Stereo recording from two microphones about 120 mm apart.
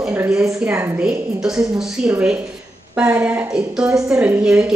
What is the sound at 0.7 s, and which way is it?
Speech, 20° right (ahead or behind).